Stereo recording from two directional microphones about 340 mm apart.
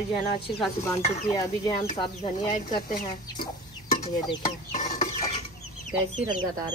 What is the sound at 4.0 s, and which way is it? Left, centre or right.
Stir, left.